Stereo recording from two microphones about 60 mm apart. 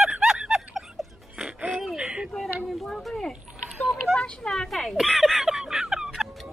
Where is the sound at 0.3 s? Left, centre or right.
Centre.